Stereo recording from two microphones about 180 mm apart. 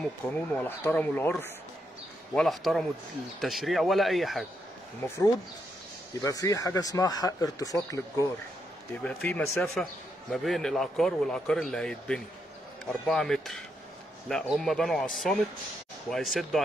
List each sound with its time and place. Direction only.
0.0 s a man's voice: 5° left (ahead or behind)
5.0 s speech: 15° left (ahead or behind)
9.0 s a man's voice: 5° left (ahead or behind)